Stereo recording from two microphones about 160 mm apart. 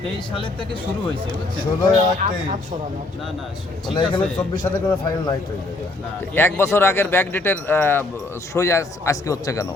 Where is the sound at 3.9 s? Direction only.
30° left (ahead or behind).